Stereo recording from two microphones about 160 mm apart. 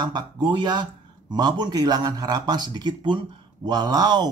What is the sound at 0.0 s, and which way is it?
Speech, 30° right (ahead or behind).